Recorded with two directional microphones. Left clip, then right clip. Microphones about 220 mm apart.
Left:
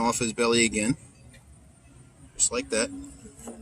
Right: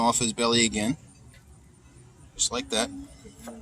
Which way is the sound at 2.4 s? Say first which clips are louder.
Even; 35° right (ahead or behind).